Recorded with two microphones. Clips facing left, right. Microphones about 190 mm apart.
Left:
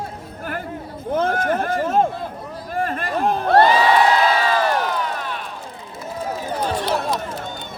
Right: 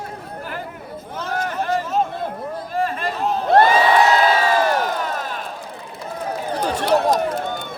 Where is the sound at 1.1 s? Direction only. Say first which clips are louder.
Left 6 dB; 55° left (ahead or behind).